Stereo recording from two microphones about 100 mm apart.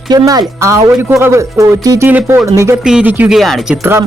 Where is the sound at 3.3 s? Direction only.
Centre (ahead or behind).